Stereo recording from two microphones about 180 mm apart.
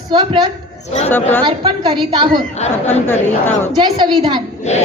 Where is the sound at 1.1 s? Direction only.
10° left (ahead or behind).